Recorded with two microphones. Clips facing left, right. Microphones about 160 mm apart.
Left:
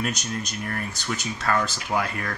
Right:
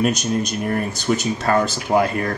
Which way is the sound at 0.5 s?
20° right (ahead or behind).